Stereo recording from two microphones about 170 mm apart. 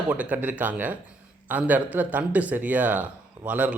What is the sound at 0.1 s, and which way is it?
Speech, 10° right (ahead or behind).